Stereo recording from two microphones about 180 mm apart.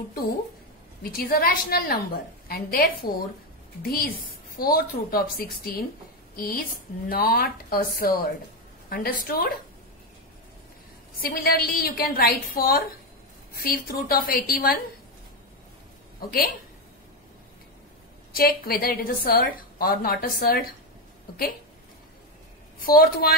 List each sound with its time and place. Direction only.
1.1 s a woman's voice: 55° left (ahead or behind)
11.1 s a woman's voice: 60° left (ahead or behind)
16.2 s a woman's voice: 55° left (ahead or behind)
18.3 s a woman's voice: 55° left (ahead or behind)
22.8 s a woman's voice: 55° left (ahead or behind)